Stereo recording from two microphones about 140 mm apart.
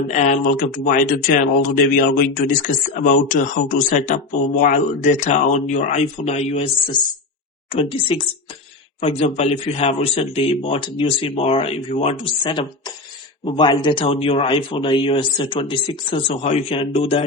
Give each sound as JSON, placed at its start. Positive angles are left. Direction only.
{"t": 0.1, "sound": "speech", "side_deg": 60}
{"t": 7.7, "sound": "speech", "side_deg": 40}